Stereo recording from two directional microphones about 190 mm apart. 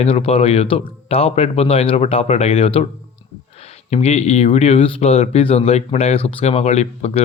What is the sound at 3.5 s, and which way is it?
Speech, 35° left (ahead or behind).